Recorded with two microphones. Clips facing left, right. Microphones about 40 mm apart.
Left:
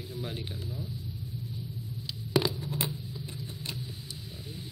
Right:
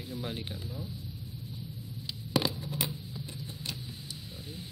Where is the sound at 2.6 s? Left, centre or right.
Left.